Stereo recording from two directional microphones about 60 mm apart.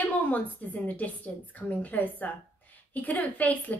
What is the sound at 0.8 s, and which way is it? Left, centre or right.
A woman's voice, left.